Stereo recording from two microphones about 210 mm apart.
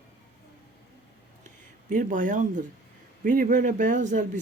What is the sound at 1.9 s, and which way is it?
Speech, 40° right (ahead or behind).